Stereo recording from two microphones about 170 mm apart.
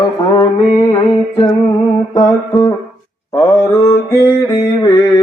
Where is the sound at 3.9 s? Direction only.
15° left (ahead or behind).